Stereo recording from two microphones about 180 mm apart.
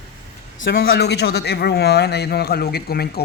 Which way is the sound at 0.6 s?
75° left (ahead or behind).